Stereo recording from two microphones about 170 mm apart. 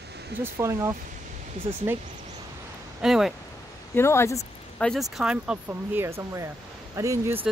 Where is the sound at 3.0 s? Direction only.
Centre (ahead or behind).